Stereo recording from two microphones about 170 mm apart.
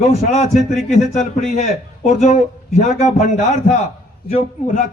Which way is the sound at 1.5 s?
40° left (ahead or behind).